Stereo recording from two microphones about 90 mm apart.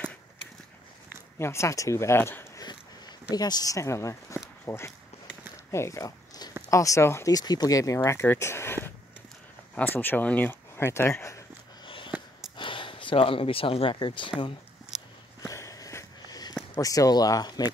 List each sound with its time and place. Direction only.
1.4 s speech: 30° left (ahead or behind)
2.6 s a sound: 50° left (ahead or behind); by 4.4 s 35° left (ahead or behind)
4.6 s speech: 30° left (ahead or behind)
5.7 s zipper: 35° left (ahead or behind)
6.7 s speech: 35° left (ahead or behind)
7.3 s speech: 45° left (ahead or behind)
8.4 s a sound: 30° left (ahead or behind)
9.8 s speech: 20° left (ahead or behind)
11.8 s a sound: 65° left (ahead or behind)
12.5 s speech: 70° left (ahead or behind)
14.9 s walk: 5° right (ahead or behind)
15.4 s a sound: 40° left (ahead or behind)
16.8 s speech: 40° left (ahead or behind)